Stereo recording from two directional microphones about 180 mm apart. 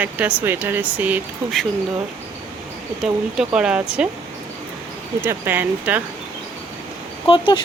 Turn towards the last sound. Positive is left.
turn(degrees=30)  # may be behind; listen again after turning